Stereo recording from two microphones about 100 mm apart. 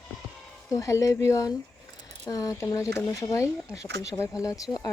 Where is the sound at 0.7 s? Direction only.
30° left (ahead or behind).